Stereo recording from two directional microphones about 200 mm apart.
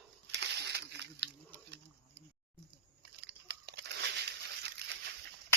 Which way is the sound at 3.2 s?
55° right (ahead or behind).